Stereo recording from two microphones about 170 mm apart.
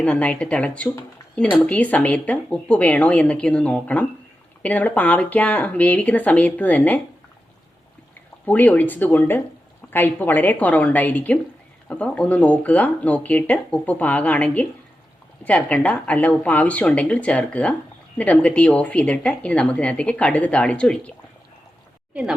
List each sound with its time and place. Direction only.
0.0 s speech: 10° left (ahead or behind)
8.4 s speech: 10° left (ahead or behind)
22.1 s speech: 5° right (ahead or behind)